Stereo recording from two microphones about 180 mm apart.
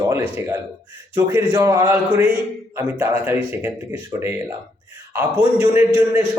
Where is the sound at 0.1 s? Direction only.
15° right (ahead or behind).